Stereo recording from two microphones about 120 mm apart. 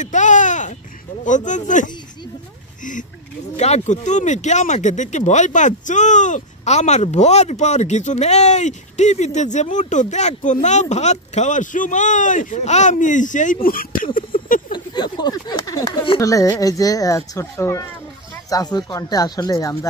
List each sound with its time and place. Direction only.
0.0 s a sound: 90° left
1.2 s speech: 90° left
3.5 s speech: 70° left (ahead or behind); by 13.6 s 90° left
14.7 s a sound: 35° left (ahead or behind)
16.2 s speech: 30° left (ahead or behind)
18.5 s speech: 35° left (ahead or behind)